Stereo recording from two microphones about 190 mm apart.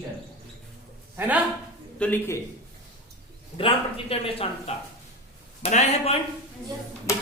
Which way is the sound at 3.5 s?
30° left (ahead or behind).